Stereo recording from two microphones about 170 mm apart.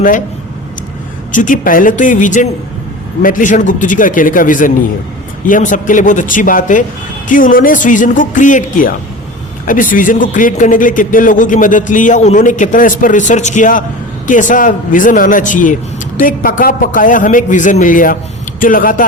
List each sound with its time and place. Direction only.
1.3 s a man's voice: 50° left (ahead or behind)